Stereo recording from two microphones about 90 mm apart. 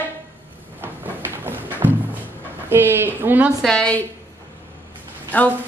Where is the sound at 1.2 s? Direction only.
25° right (ahead or behind).